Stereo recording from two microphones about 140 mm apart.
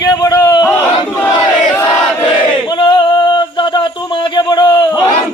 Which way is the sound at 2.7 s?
35° left (ahead or behind).